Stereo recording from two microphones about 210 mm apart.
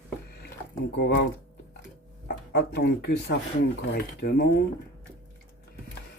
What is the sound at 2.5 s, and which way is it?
Speech, 50° left (ahead or behind).